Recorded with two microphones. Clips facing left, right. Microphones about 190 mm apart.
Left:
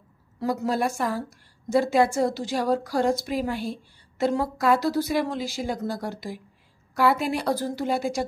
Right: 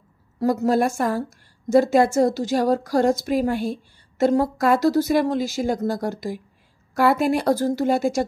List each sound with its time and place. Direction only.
0.4 s speech: 45° right (ahead or behind)